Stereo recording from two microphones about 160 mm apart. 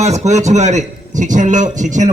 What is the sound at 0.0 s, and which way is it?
A man's voice, 45° right (ahead or behind).